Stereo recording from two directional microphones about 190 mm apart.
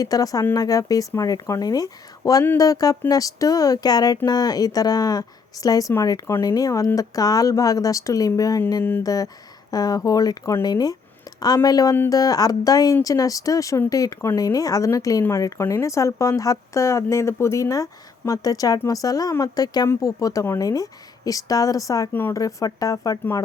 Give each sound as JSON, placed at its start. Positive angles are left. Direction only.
{"t": 0.0, "sound": "speech", "side_deg": 20}